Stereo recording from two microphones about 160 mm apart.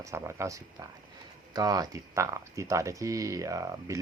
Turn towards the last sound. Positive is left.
turn(degrees=-20)  # may be behind; listen again after turning